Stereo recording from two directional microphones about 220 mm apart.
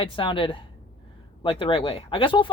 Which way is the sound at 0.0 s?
25° left (ahead or behind).